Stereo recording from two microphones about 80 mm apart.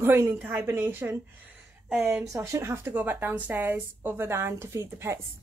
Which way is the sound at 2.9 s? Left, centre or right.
Right.